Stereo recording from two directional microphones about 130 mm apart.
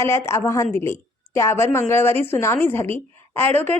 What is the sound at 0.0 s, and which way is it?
A woman's voice, 20° left (ahead or behind).